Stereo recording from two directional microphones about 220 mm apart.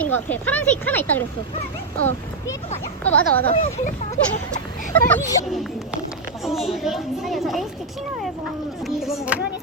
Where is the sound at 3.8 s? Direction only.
35° left (ahead or behind).